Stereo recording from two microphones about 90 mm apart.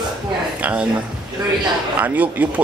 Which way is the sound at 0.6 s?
15° right (ahead or behind).